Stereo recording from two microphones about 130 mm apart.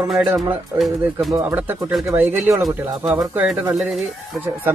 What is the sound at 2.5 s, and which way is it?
Speech, centre (ahead or behind).